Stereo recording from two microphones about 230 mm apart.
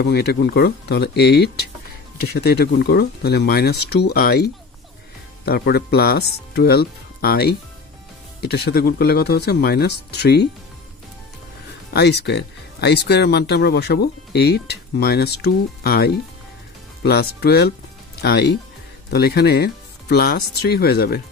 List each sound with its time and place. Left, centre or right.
0.0 s speech: left
11.9 s speech: left